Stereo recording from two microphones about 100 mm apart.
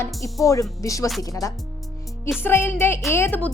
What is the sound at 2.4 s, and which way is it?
A woman's voice, 25° left (ahead or behind).